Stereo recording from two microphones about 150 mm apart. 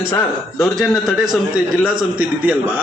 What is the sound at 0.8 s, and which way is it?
A man's voice, centre (ahead or behind).